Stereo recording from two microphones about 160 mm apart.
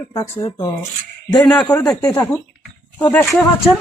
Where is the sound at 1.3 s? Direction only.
5° left (ahead or behind).